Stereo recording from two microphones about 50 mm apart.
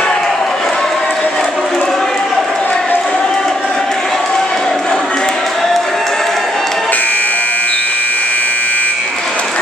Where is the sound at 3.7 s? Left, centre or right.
Centre.